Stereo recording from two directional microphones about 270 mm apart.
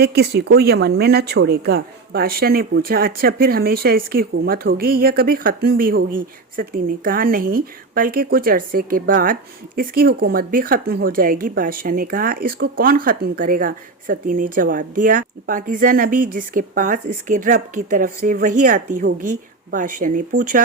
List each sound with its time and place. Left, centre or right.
0.0 s a woman's voice: right